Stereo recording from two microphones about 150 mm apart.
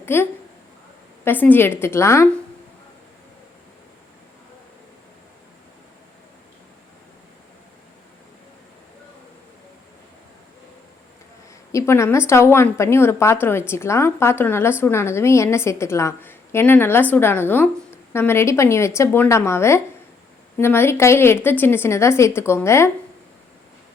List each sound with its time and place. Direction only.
0.0 s a woman's voice: 15° left (ahead or behind)
11.7 s a woman's voice: 20° left (ahead or behind)